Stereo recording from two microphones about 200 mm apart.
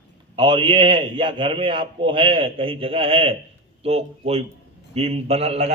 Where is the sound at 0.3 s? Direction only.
20° right (ahead or behind).